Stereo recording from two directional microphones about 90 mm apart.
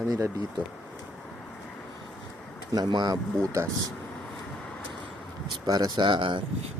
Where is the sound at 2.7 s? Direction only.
50° right (ahead or behind).